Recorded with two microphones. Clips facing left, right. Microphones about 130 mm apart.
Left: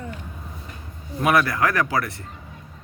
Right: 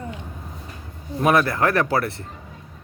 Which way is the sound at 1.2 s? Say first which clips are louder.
Right 1 dB; 30° right (ahead or behind).